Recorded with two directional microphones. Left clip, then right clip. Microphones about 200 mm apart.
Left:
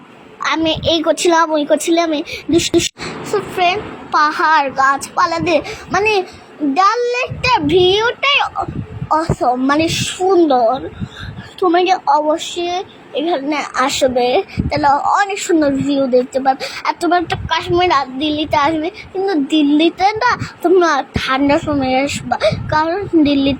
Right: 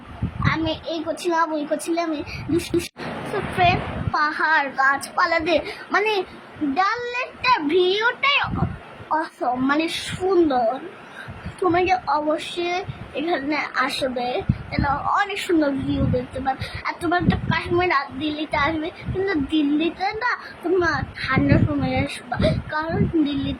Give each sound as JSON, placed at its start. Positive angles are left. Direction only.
{"t": 0.4, "sound": "a woman's voice", "side_deg": 30}
{"t": 3.6, "sound": "speech", "side_deg": 25}
{"t": 11.7, "sound": "speech", "side_deg": 20}
{"t": 16.4, "sound": "speech", "side_deg": 30}